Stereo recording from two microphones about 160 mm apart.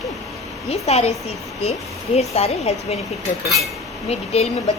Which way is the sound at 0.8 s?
40° left (ahead or behind).